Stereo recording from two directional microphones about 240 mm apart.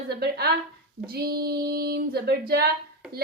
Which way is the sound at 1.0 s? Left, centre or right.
Right.